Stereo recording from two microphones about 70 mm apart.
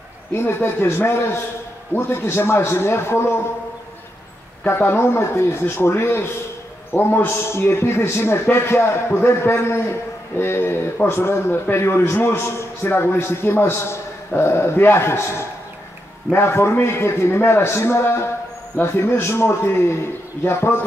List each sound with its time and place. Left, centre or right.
0.3 s a man's voice: left
4.6 s a man's voice: left